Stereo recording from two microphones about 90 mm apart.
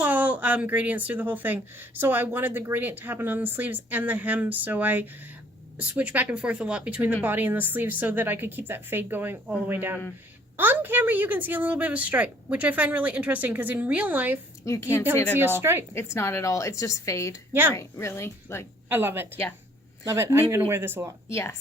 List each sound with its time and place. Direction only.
0.0 s a woman's voice: 15° right (ahead or behind)
14.6 s a woman's voice: 35° left (ahead or behind)
15.4 s a woman's voice: 25° right (ahead or behind)
16.0 s a woman's voice: 30° left (ahead or behind)
17.5 s a woman's voice: 25° right (ahead or behind)
17.7 s a woman's voice: 30° left (ahead or behind)
18.9 s a woman's voice: 25° right (ahead or behind)
21.2 s speech: 30° left (ahead or behind)